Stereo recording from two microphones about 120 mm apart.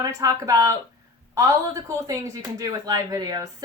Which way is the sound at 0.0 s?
30° right (ahead or behind).